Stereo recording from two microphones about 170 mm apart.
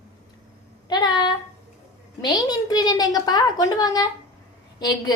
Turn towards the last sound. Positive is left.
turn(degrees=25)  # may be behind; listen again after turning